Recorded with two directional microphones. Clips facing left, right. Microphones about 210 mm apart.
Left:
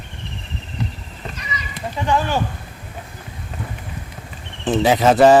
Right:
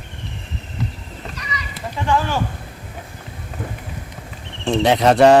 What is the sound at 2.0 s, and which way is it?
Speech, 20° left (ahead or behind).